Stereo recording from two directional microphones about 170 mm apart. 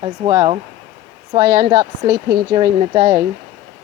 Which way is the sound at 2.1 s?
65° right (ahead or behind).